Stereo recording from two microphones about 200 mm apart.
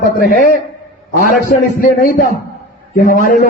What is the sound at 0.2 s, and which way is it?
A man's voice, 45° left (ahead or behind).